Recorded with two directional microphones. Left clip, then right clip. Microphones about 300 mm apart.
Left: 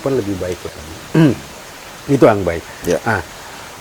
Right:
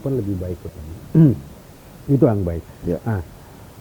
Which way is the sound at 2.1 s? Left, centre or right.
Centre.